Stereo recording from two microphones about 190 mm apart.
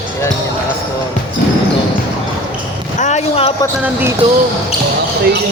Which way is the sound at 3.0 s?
35° left (ahead or behind).